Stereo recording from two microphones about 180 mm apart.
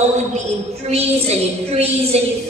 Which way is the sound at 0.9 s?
35° right (ahead or behind).